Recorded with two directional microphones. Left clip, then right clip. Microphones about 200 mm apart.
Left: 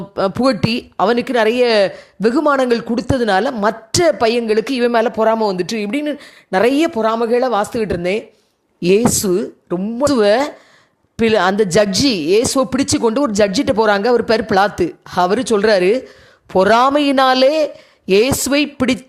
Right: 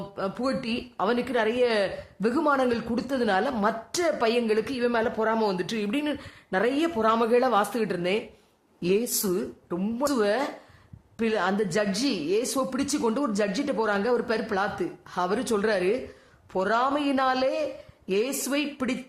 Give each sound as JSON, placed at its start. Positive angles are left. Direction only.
{"t": 0.2, "sound": "speech", "side_deg": 40}